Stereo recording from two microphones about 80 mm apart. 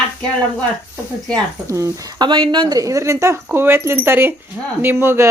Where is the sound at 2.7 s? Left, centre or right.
Right.